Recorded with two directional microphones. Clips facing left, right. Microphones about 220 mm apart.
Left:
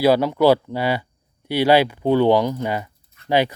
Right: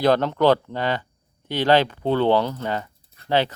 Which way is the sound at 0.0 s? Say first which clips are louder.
Left 3 dB; 10° left (ahead or behind).